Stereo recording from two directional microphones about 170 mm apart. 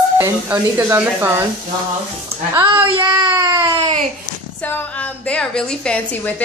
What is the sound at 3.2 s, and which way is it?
Baby cry, 25° right (ahead or behind).